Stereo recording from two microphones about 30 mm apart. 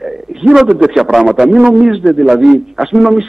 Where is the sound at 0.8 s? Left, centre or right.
Centre.